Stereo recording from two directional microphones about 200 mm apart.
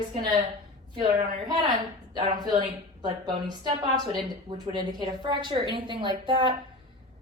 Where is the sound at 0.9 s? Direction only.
25° right (ahead or behind).